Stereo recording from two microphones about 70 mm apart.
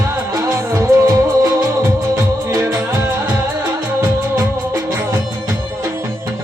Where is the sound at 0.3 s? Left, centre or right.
Right.